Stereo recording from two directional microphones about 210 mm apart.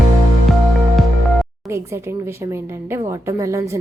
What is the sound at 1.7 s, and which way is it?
A woman's voice, 15° right (ahead or behind).